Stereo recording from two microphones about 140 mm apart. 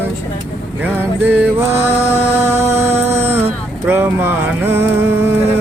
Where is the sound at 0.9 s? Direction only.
15° right (ahead or behind).